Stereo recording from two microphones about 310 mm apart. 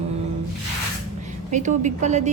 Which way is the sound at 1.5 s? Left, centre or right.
Right.